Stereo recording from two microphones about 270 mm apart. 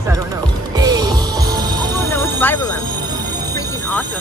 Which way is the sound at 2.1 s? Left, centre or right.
Centre.